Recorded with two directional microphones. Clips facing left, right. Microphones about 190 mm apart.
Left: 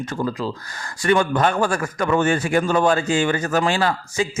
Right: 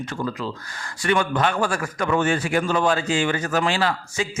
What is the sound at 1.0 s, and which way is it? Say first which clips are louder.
A man's voice: left 3 dB; 45° left (ahead or behind).